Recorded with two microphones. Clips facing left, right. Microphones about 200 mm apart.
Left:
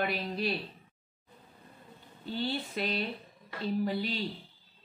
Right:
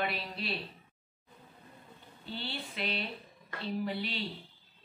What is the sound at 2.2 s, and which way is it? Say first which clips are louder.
Speech: left 7 dB; 45° left (ahead or behind).